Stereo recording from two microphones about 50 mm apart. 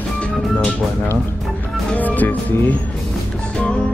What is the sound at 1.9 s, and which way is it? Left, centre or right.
Speech, left.